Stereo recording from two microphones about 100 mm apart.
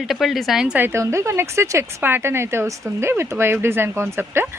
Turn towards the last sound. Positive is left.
turn(degrees=-25)  # may be behind; listen again after turning